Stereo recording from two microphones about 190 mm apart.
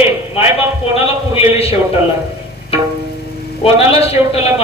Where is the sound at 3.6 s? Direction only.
30° left (ahead or behind).